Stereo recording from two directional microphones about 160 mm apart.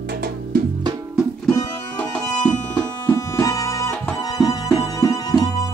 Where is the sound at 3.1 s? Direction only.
20° left (ahead or behind).